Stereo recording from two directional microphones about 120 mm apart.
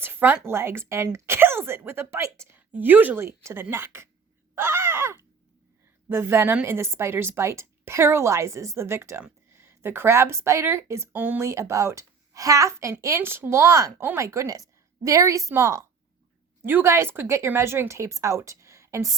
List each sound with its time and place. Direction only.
0.0 s a sound: 15° right (ahead or behind)
0.4 s a woman's voice: 20° right (ahead or behind)
4.5 s groan: 20° right (ahead or behind)
6.1 s a woman's voice: 20° right (ahead or behind)